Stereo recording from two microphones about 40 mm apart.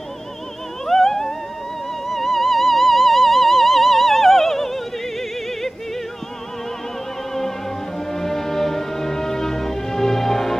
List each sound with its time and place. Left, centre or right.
0.8 s music: centre
8.1 s music: centre